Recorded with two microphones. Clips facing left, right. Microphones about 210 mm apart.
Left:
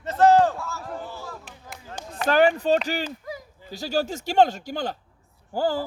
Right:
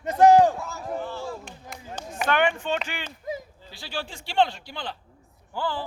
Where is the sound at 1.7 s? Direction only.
Centre (ahead or behind).